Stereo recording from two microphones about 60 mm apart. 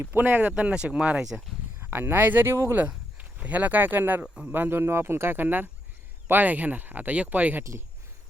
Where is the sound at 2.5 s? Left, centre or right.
Right.